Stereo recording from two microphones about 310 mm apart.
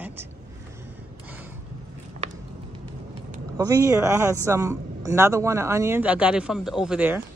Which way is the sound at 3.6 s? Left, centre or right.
Centre.